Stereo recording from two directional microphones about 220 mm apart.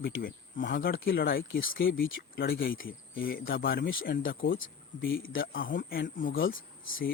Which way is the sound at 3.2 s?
40° left (ahead or behind).